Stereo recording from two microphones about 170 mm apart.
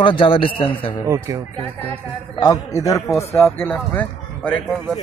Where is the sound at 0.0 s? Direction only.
30° left (ahead or behind).